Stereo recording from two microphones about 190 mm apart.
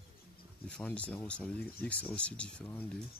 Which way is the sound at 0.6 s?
5° left (ahead or behind).